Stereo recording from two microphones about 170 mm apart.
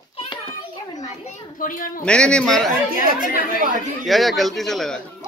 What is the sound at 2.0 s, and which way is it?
Speech, 5° left (ahead or behind).